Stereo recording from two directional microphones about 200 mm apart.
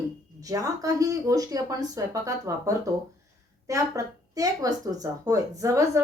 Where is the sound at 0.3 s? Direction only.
15° right (ahead or behind).